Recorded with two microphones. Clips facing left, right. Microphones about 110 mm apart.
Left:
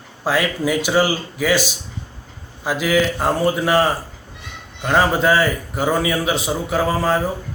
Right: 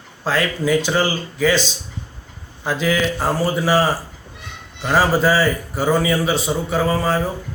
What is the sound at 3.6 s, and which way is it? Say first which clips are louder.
A man's voice: even; 5° right (ahead or behind).